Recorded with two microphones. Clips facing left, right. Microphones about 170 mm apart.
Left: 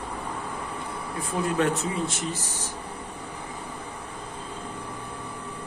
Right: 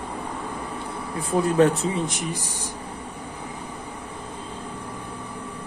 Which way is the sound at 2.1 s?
15° right (ahead or behind).